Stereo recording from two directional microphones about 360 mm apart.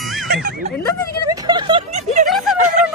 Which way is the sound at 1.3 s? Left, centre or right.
Centre.